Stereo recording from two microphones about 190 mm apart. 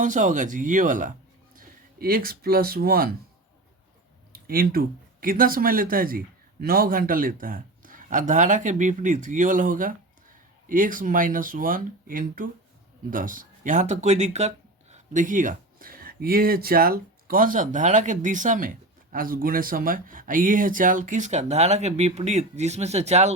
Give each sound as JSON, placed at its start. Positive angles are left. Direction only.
{"t": 0.0, "sound": "speech", "side_deg": -40}
{"t": 4.3, "sound": "speech", "side_deg": -50}